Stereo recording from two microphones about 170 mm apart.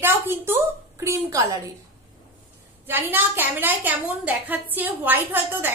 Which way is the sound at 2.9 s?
10° right (ahead or behind).